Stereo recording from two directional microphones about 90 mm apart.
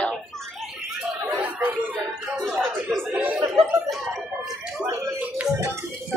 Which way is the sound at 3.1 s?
20° right (ahead or behind).